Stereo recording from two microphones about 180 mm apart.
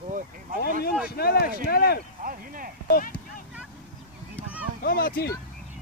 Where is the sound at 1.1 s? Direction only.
60° left (ahead or behind).